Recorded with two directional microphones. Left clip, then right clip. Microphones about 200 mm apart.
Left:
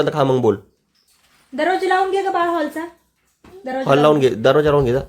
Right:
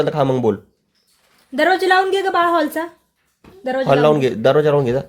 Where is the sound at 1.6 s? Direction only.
55° right (ahead or behind).